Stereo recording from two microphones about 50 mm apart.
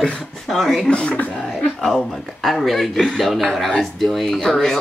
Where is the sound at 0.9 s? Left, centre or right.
Left.